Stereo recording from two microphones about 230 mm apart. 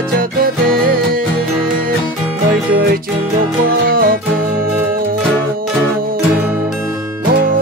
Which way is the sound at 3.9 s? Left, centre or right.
Right.